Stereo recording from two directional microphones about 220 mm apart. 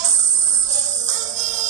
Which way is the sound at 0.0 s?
35° right (ahead or behind).